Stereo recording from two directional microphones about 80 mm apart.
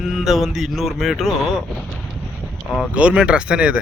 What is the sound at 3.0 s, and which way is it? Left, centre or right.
Speech, centre.